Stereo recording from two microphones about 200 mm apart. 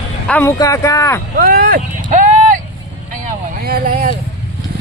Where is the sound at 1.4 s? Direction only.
45° right (ahead or behind).